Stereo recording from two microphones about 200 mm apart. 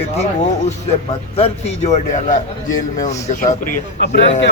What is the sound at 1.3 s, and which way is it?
A man's voice, 30° left (ahead or behind).